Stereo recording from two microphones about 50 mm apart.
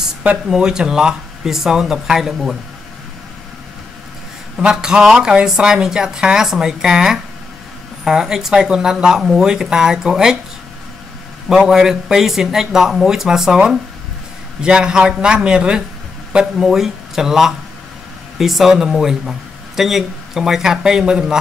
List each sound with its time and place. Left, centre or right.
0.5 s speech: centre
4.6 s speech: centre
11.4 s speech: centre